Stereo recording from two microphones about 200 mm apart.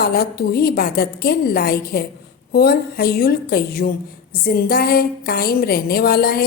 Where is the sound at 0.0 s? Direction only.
50° left (ahead or behind).